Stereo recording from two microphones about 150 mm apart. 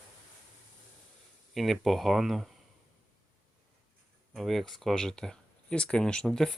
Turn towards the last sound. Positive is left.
turn(degrees=5)  # may be behind; listen again after turning